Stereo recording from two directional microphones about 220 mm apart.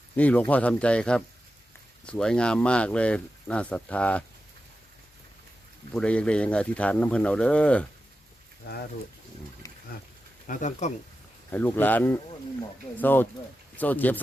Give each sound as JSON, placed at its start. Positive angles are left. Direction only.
{"t": 0.2, "sound": "speech", "side_deg": 5}
{"t": 5.9, "sound": "speech", "side_deg": 5}
{"t": 8.7, "sound": "speech", "side_deg": 45}
{"t": 9.6, "sound": "a sound", "side_deg": 15}
{"t": 10.4, "sound": "speech", "side_deg": 35}
{"t": 11.5, "sound": "speech", "side_deg": 10}